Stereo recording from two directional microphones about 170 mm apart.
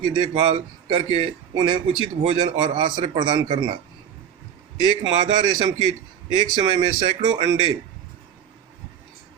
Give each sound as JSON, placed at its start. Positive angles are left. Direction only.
{"t": 0.0, "sound": "a man's voice", "side_deg": -25}
{"t": 0.3, "sound": "a man's voice", "side_deg": -35}
{"t": 4.8, "sound": "a man's voice", "side_deg": -25}